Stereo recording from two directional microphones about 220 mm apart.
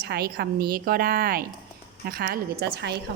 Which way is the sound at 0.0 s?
45° right (ahead or behind).